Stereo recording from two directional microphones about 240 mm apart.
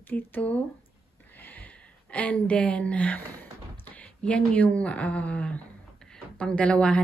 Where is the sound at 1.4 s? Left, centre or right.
Centre.